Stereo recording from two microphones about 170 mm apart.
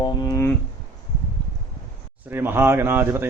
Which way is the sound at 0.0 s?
20° left (ahead or behind).